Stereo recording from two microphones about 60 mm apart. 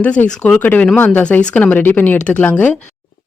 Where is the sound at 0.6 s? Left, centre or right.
Left.